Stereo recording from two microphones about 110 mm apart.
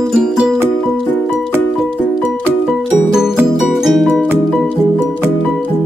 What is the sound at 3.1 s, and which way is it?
Music, 5° right (ahead or behind).